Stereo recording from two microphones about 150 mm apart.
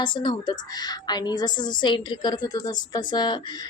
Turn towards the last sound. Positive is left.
turn(degrees=30)  # may be behind; listen again after turning